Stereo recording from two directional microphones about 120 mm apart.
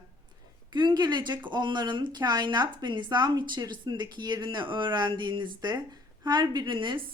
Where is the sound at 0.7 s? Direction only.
40° right (ahead or behind).